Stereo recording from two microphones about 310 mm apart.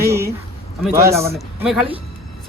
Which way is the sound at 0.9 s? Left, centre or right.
Centre.